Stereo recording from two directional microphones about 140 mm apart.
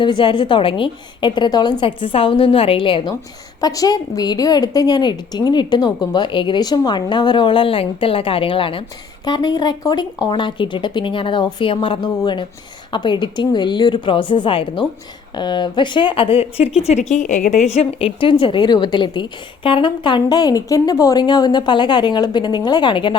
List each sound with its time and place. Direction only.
0.0 s a woman's voice: 35° left (ahead or behind)
16.8 s a woman's voice: 55° left (ahead or behind); by 23.1 s 35° left (ahead or behind)